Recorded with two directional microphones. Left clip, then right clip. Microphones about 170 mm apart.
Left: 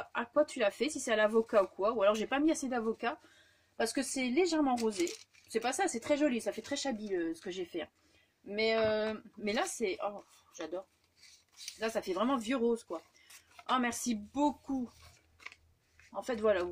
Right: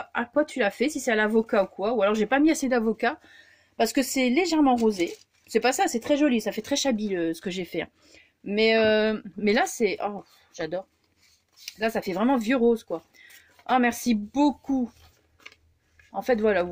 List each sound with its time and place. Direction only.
0.0 s speech: 40° right (ahead or behind)
8.5 s speech: 65° right (ahead or behind)
11.8 s speech: 45° right (ahead or behind)
16.1 s speech: 50° right (ahead or behind)